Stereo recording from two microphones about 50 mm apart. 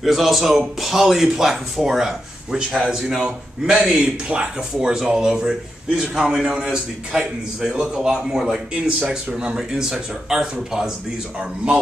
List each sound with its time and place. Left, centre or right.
0.0 s a man's voice: centre